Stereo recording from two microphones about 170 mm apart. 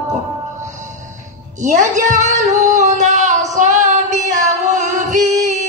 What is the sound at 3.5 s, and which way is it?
Female singing, 45° right (ahead or behind).